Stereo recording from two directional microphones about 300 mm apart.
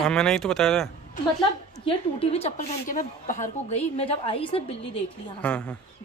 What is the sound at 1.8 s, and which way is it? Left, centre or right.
A woman's voice, centre.